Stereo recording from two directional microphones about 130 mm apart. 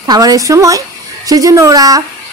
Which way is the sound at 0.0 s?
30° right (ahead or behind).